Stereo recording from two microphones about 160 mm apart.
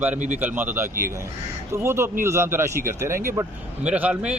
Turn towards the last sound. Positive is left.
turn(degrees=-5)  # may be behind; listen again after turning